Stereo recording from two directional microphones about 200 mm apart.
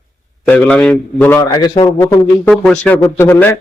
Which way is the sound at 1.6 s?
20° left (ahead or behind).